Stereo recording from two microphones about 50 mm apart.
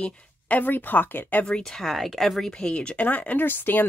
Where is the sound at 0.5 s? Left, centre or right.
Left.